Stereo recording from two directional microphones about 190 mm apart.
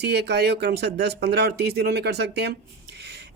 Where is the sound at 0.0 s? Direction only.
60° right (ahead or behind).